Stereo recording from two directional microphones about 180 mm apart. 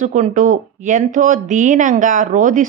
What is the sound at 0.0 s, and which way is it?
A woman's voice, 45° right (ahead or behind).